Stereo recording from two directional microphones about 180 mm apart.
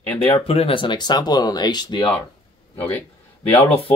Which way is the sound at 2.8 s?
10° left (ahead or behind).